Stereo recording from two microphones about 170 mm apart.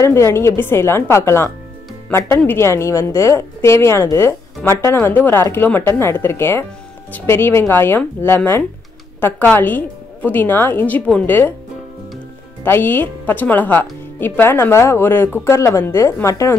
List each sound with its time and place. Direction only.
0.0 s a woman's voice: 15° left (ahead or behind)
12.6 s a woman's voice: 10° left (ahead or behind)